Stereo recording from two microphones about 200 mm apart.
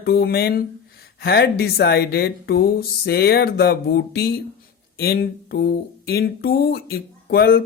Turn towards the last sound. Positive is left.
turn(degrees=50)  # may be behind; listen again after turning